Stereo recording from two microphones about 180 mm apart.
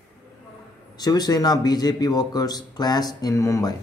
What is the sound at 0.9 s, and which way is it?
Speech, 20° left (ahead or behind).